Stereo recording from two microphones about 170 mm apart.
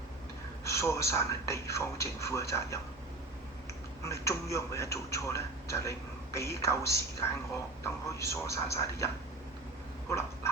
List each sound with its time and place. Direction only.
0.6 s a man's voice: 15° left (ahead or behind)
4.0 s a man's voice: 15° left (ahead or behind)
10.1 s duck: 15° left (ahead or behind)